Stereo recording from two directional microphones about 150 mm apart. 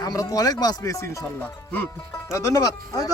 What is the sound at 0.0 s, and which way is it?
Speech, 25° left (ahead or behind).